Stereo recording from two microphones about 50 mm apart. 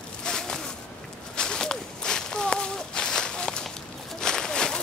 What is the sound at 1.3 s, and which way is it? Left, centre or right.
Walk, centre.